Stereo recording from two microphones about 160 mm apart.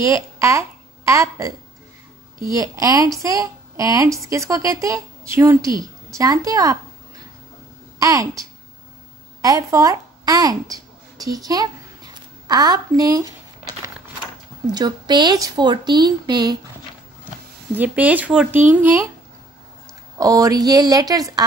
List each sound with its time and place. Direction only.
0.0 s speech: 20° right (ahead or behind)
8.0 s speech: 20° right (ahead or behind)
14.7 s speech: 25° right (ahead or behind)
17.7 s speech: 10° right (ahead or behind)
20.2 s speech: 20° right (ahead or behind)